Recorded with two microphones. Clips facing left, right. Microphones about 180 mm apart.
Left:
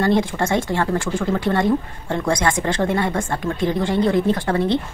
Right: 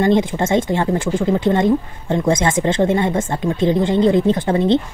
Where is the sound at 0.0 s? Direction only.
20° right (ahead or behind).